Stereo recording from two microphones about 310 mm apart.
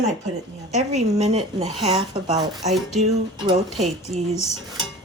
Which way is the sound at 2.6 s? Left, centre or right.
Centre.